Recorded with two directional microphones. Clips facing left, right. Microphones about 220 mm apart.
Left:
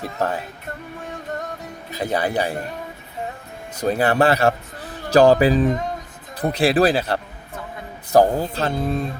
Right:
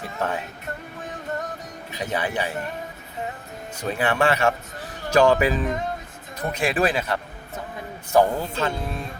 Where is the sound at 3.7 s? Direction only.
40° left (ahead or behind).